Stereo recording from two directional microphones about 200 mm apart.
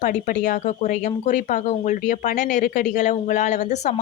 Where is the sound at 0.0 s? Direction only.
40° left (ahead or behind).